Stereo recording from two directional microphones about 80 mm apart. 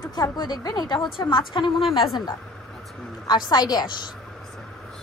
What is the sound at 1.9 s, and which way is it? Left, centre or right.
Speech, left.